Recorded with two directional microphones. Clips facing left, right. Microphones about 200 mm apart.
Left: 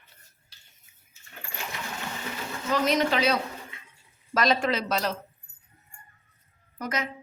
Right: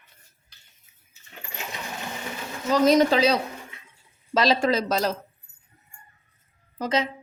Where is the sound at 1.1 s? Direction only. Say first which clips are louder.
Right 1 dB; 20° right (ahead or behind).